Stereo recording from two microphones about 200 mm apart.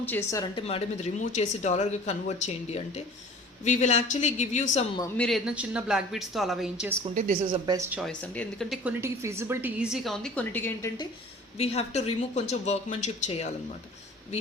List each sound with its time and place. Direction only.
0.0 s speech: 10° left (ahead or behind)
0.5 s speech: 30° left (ahead or behind)
5.1 s a woman's voice: 5° left (ahead or behind)
7.0 s a woman's voice: 40° right (ahead or behind)
7.7 s speech: 10° right (ahead or behind)
8.2 s a woman's voice: 5° left (ahead or behind)
11.5 s speech: 30° left (ahead or behind)